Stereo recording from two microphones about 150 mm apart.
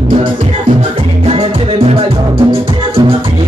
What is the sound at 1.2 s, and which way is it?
Music, 40° right (ahead or behind).